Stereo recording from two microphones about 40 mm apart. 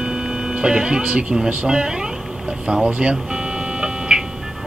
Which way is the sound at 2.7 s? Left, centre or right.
Right.